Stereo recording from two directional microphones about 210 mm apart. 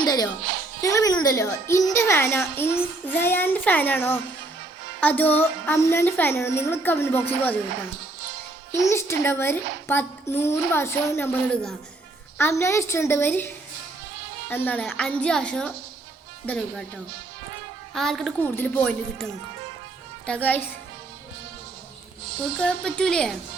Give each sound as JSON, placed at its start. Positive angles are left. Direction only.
{"t": 0.0, "sound": "a child's voice", "side_deg": 20}
{"t": 8.7, "sound": "speech", "side_deg": 10}
{"t": 14.5, "sound": "a woman's voice", "side_deg": 10}
{"t": 17.9, "sound": "a woman's voice", "side_deg": 0}
{"t": 22.6, "sound": "a woman's voice", "side_deg": 5}